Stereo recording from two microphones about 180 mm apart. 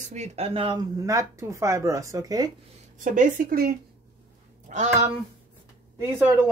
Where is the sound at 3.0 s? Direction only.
45° right (ahead or behind).